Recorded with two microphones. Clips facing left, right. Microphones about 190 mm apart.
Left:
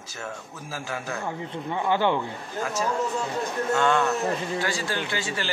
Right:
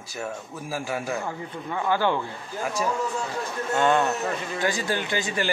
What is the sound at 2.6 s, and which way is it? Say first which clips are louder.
Speech: even; 15° right (ahead or behind).